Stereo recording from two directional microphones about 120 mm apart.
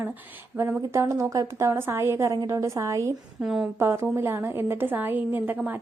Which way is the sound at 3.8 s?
20° right (ahead or behind).